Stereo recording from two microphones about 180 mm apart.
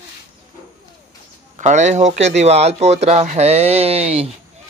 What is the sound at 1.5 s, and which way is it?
A man's voice, 40° right (ahead or behind).